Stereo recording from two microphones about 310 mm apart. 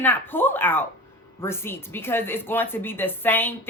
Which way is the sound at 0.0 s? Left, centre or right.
Centre.